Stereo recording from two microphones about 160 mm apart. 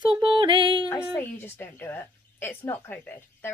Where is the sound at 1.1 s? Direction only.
15° left (ahead or behind).